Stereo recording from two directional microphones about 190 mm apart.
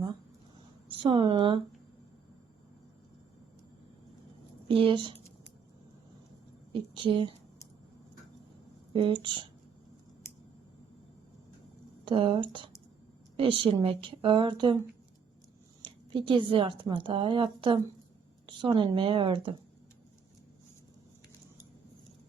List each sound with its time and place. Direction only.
0.9 s speech: 25° right (ahead or behind)
4.7 s speech: 25° right (ahead or behind)
6.7 s a woman's voice: 25° right (ahead or behind)
8.9 s speech: 25° right (ahead or behind)
12.0 s a woman's voice: 25° right (ahead or behind)
15.8 s a woman's voice: 25° right (ahead or behind)